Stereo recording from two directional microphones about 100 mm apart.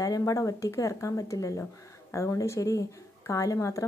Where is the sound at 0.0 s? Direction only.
35° left (ahead or behind).